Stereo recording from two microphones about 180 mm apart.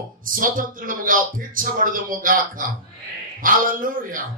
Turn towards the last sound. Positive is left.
turn(degrees=-50)  # may be behind; listen again after turning